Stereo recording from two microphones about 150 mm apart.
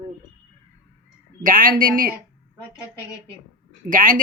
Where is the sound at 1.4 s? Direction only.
65° right (ahead or behind).